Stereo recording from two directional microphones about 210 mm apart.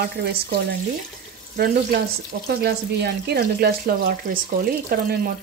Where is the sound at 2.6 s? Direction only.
50° right (ahead or behind).